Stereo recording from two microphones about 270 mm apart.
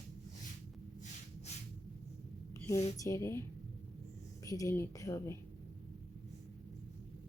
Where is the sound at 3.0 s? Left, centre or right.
Centre.